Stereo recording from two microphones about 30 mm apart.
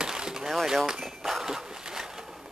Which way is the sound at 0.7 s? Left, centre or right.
Centre.